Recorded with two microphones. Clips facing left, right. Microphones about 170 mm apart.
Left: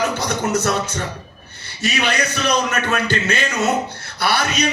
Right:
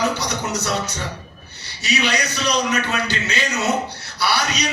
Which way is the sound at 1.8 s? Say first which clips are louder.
Left 1 dB; 50° left (ahead or behind).